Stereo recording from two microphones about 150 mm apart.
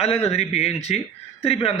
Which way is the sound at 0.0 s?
45° left (ahead or behind).